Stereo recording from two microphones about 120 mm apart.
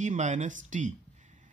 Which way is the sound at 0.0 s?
90° right.